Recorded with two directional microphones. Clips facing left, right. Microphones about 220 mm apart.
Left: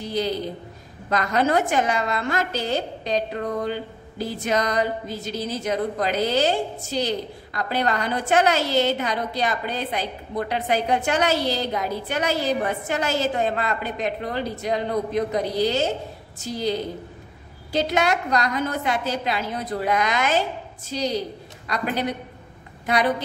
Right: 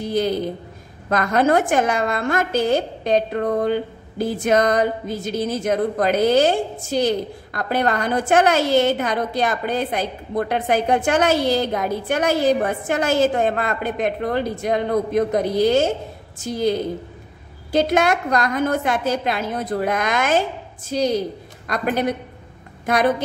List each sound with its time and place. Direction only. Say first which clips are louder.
0.0 s a woman's voice: right 5 dB; 50° right (ahead or behind)
17.7 s a woman's voice: right 4 dB; 50° right (ahead or behind)